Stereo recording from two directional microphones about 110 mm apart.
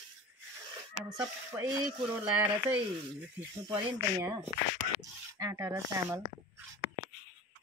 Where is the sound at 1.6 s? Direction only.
30° right (ahead or behind).